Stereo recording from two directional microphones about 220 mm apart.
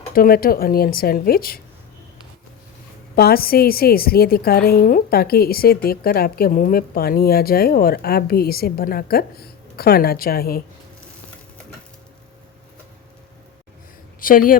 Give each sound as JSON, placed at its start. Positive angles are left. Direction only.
{"t": 0.1, "sound": "speech", "side_deg": 40}
{"t": 3.2, "sound": "a woman's voice", "side_deg": 45}
{"t": 14.2, "sound": "speech", "side_deg": 40}